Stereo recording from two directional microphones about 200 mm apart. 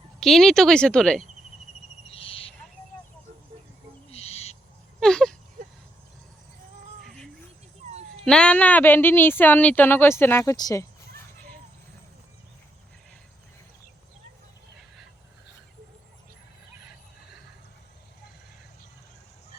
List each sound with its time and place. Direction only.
0.2 s speech: centre (ahead or behind)
2.0 s owl: 30° left (ahead or behind)
4.1 s owl: 30° left (ahead or behind)
4.9 s a sound: 5° left (ahead or behind)
7.9 s cat: 30° right (ahead or behind)
8.2 s speech: 5° left (ahead or behind)